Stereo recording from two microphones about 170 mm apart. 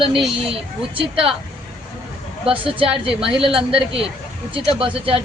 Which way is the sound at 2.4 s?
30° right (ahead or behind).